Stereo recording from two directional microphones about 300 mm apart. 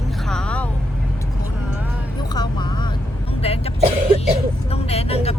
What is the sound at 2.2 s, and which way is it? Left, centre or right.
Vehicle, centre.